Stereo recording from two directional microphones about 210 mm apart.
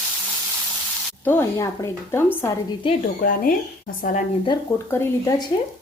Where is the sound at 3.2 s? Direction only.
40° left (ahead or behind).